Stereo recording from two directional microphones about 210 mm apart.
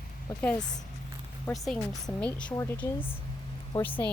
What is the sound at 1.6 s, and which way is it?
A woman's voice, centre (ahead or behind).